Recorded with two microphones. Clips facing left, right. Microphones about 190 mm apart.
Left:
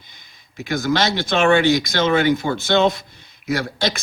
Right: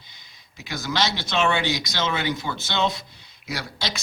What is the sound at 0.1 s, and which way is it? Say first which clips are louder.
Speech: left 2 dB; 50° left (ahead or behind).